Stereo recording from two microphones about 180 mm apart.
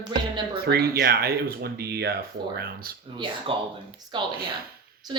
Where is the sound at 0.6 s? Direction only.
60° right (ahead or behind).